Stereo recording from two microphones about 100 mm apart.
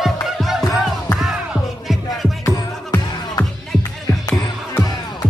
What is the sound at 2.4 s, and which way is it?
Music, 35° left (ahead or behind).